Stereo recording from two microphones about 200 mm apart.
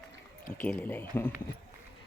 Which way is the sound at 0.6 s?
10° left (ahead or behind).